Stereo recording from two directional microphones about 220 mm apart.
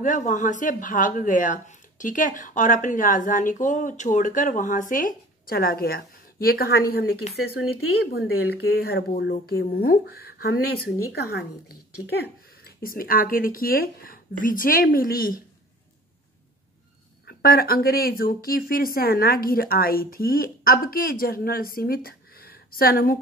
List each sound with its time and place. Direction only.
0.0 s speech: 35° left (ahead or behind)
17.3 s speech: 45° left (ahead or behind)